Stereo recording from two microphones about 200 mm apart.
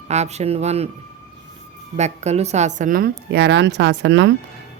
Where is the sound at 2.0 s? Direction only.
35° right (ahead or behind).